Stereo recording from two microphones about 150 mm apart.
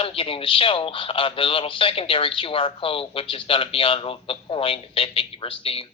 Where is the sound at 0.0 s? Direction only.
35° left (ahead or behind).